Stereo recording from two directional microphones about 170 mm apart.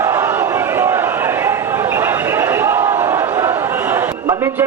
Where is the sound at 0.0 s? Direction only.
15° right (ahead or behind).